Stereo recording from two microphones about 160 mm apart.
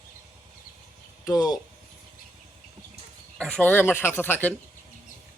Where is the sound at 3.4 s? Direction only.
5° left (ahead or behind).